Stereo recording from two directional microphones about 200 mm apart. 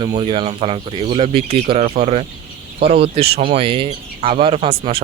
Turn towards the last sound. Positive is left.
turn(degrees=-30)  # may be behind; listen again after turning